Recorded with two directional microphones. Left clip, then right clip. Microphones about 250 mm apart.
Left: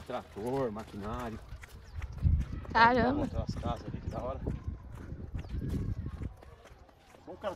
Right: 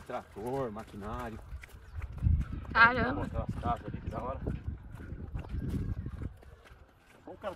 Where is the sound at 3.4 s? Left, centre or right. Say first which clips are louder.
Right 4 dB; right.